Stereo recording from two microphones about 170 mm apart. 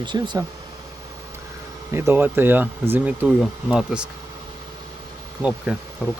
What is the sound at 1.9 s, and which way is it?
Speech, 15° right (ahead or behind).